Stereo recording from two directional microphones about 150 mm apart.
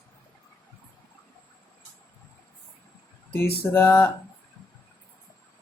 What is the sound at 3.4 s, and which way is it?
Speech, 15° left (ahead or behind).